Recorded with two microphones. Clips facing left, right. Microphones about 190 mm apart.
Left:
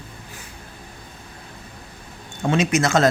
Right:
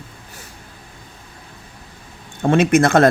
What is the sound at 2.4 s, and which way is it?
Speech, 55° right (ahead or behind).